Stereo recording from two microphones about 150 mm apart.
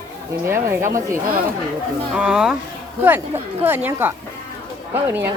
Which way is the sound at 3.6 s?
15° right (ahead or behind).